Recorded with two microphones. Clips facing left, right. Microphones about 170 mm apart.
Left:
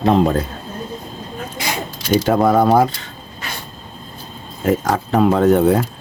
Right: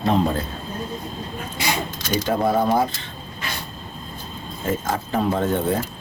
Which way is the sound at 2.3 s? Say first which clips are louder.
Left 5 dB; 70° left (ahead or behind).